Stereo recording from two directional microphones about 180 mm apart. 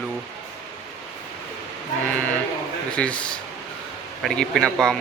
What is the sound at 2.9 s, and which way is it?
Speech, 5° left (ahead or behind).